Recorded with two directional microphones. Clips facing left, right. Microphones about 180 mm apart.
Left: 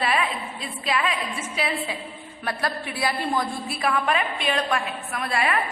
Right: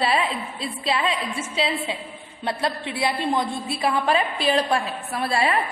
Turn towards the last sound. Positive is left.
turn(degrees=-30)  # may be behind; listen again after turning